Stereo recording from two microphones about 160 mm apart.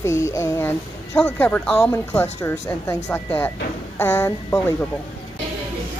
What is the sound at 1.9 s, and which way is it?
Speech, 20° left (ahead or behind).